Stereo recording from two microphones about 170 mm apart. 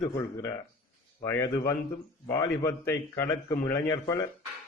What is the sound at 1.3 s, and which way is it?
A man's voice, 15° left (ahead or behind).